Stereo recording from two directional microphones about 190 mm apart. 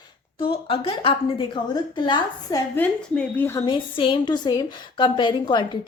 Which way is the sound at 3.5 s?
20° left (ahead or behind).